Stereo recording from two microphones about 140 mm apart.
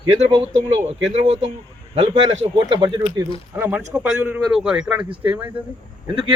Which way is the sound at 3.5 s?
15° right (ahead or behind).